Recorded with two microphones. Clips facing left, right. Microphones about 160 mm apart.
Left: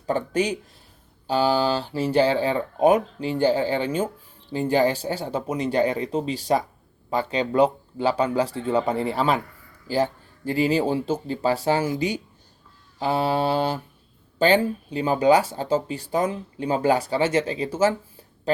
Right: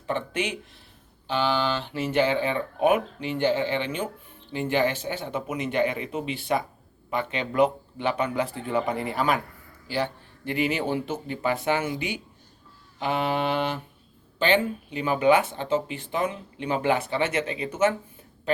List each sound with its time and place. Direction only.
0.0 s speech: 40° left (ahead or behind)
9.8 s speech: 40° left (ahead or behind)